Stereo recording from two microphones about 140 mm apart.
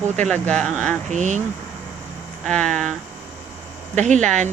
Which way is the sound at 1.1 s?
55° right (ahead or behind).